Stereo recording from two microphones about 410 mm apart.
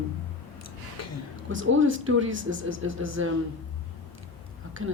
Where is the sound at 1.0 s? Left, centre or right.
Left.